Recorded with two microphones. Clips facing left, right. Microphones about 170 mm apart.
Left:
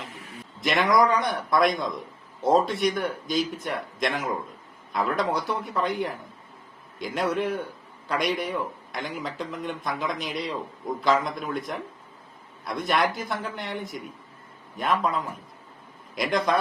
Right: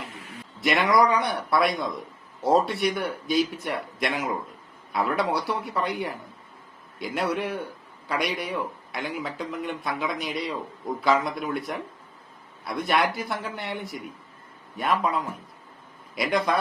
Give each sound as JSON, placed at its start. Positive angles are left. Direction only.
{"t": 0.6, "sound": "a man's voice", "side_deg": -5}